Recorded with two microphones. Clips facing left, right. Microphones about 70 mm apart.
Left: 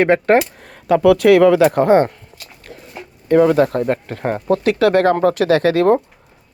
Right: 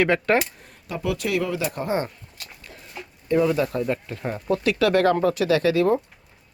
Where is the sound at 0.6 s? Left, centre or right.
Left.